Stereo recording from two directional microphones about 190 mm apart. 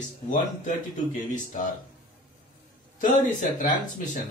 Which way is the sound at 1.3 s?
40° left (ahead or behind).